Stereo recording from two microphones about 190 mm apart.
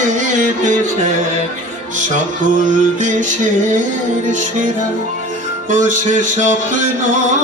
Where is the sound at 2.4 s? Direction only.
40° right (ahead or behind).